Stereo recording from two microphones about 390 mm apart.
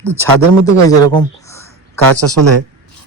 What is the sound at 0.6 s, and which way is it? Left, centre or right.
Speech, centre.